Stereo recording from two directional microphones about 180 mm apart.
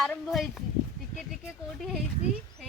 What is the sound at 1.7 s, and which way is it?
Speech, centre (ahead or behind).